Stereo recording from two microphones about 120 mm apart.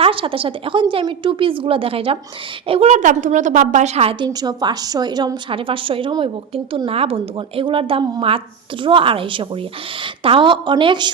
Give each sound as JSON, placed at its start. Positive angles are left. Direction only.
{"t": 0.0, "sound": "a woman's voice", "side_deg": -50}
{"t": 2.9, "sound": "a woman's voice", "side_deg": -90}
{"t": 4.3, "sound": "a woman's voice", "side_deg": -35}